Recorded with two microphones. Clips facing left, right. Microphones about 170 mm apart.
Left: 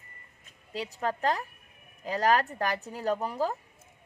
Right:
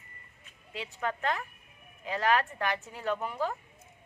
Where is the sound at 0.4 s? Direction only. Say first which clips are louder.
Left 5 dB; 40° left (ahead or behind).